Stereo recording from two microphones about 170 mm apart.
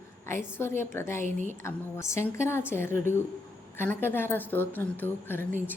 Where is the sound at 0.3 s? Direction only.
15° left (ahead or behind).